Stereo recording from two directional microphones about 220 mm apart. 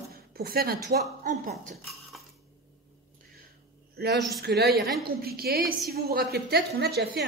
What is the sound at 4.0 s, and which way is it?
A woman's voice, 45° right (ahead or behind).